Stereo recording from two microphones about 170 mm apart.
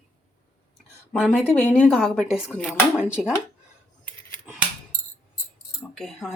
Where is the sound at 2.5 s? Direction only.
5° left (ahead or behind).